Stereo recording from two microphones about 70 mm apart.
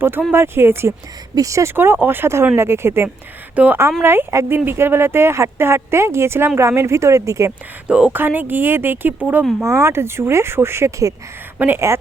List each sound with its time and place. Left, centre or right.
0.0 s speech: right
1.4 s speech: right
1.7 s speech: right
3.5 s a woman's voice: right
4.0 s speech: right
7.9 s speech: centre
8.1 s speech: right
9.6 s speech: right
11.5 s speech: right